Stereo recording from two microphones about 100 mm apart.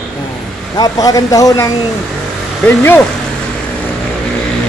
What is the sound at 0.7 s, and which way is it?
A man's voice, 40° left (ahead or behind).